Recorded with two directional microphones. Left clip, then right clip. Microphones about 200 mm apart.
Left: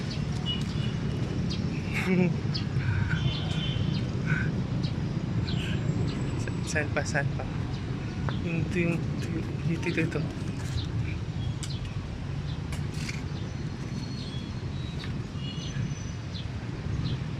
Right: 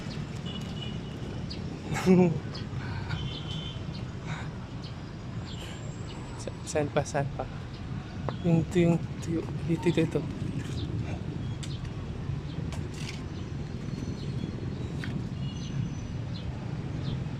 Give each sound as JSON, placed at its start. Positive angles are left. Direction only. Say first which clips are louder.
{"t": 1.9, "sound": "a sound", "louder": "right 4 dB", "side_deg": -30}
{"t": 6.7, "sound": "speech", "louder": "right 1 dB", "side_deg": -15}
{"t": 8.3, "sound": "speech", "louder": "right 5 dB", "side_deg": -20}